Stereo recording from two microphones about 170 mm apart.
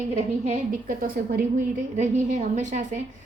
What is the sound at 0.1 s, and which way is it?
A woman's voice, 40° right (ahead or behind).